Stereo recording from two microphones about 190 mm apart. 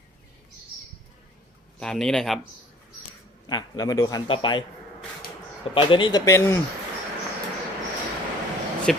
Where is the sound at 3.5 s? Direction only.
20° left (ahead or behind).